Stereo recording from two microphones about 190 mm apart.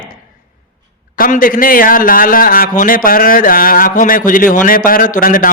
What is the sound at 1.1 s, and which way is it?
A man's voice, 45° left (ahead or behind).